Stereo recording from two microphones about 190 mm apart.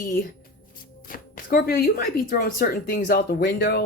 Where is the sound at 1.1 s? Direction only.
50° left (ahead or behind).